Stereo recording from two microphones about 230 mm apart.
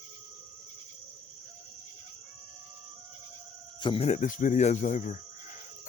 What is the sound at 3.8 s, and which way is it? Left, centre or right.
Speech, left.